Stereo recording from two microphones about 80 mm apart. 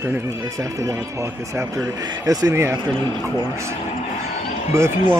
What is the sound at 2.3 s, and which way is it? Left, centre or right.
Speech, right.